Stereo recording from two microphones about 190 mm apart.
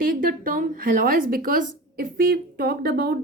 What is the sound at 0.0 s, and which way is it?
A woman's voice, 50° right (ahead or behind).